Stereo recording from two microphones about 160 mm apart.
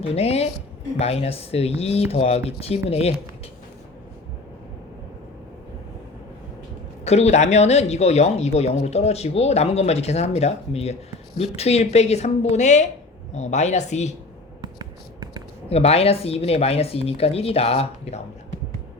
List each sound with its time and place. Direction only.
0.0 s speech: 40° left (ahead or behind)
7.0 s speech: 40° left (ahead or behind)
14.6 s a sound: 25° right (ahead or behind)
15.7 s speech: 40° left (ahead or behind)